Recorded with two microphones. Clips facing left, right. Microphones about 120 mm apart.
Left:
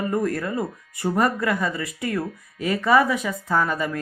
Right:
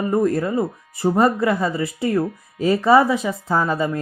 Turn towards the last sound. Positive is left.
turn(degrees=-25)  # may be behind; listen again after turning